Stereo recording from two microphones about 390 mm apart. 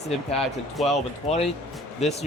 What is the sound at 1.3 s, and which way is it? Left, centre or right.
Speech, centre.